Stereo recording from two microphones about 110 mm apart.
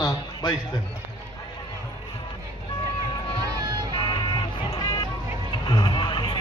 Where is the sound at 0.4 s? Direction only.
40° left (ahead or behind).